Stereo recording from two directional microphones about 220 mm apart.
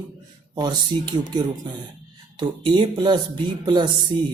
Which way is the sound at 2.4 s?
20° right (ahead or behind).